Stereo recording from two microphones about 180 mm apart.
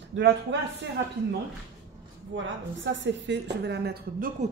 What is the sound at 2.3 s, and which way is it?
A woman's voice, 85° right.